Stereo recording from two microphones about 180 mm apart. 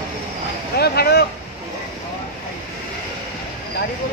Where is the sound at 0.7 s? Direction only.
60° left (ahead or behind).